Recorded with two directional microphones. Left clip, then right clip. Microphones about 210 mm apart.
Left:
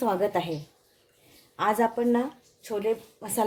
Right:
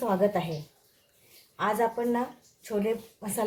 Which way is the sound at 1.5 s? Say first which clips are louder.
Left 2 dB; 45° left (ahead or behind).